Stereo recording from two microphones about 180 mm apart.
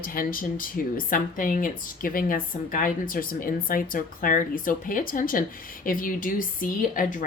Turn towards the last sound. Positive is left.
turn(degrees=50)  # may be behind; listen again after turning